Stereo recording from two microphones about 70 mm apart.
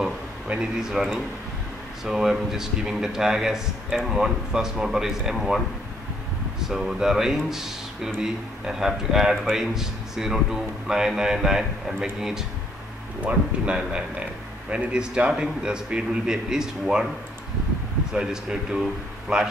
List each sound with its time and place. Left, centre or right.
0.0 s speech: centre
6.6 s speech: centre
18.1 s speech: centre